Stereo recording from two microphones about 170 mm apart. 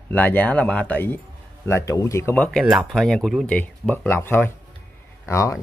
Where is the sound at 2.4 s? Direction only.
5° left (ahead or behind).